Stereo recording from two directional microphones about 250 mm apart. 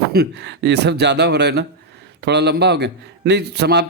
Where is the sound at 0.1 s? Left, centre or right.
Right.